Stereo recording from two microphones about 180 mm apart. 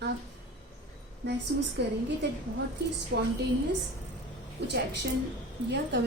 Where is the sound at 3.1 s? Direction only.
75° right (ahead or behind).